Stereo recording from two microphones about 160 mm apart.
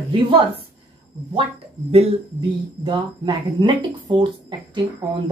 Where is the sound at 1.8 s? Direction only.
40° right (ahead or behind).